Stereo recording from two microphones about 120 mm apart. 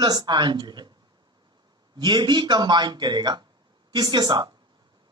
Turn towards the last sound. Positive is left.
turn(degrees=-35)  # may be behind; listen again after turning